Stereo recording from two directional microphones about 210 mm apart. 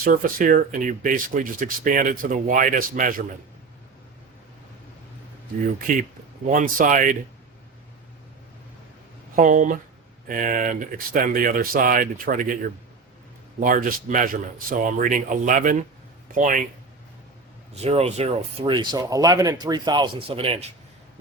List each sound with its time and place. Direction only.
0.0 s speech: 40° right (ahead or behind)
6.5 s speech: 40° right (ahead or behind)
9.3 s speech: 40° right (ahead or behind)
17.8 s speech: 30° right (ahead or behind)